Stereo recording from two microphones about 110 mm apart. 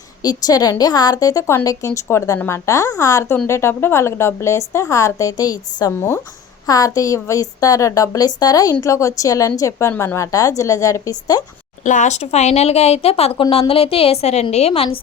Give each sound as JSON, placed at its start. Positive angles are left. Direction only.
{"t": 0.2, "sound": "a woman's voice", "side_deg": 35}
{"t": 12.0, "sound": "a woman's voice", "side_deg": 85}